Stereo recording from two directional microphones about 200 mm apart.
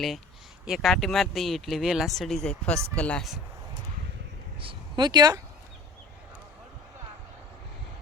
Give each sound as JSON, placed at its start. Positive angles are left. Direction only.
{"t": 0.6, "sound": "speech", "side_deg": 0}
{"t": 4.6, "sound": "speech", "side_deg": -25}